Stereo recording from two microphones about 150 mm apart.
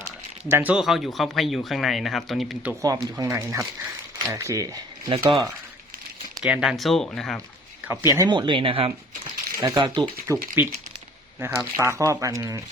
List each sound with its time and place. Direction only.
0.4 s speech: 10° right (ahead or behind)
2.8 s speech: 25° right (ahead or behind)
6.4 s speech: 5° right (ahead or behind)
7.9 s speech: 20° right (ahead or behind)
8.3 s speech: 30° right (ahead or behind)
10.6 s speech: 15° right (ahead or behind)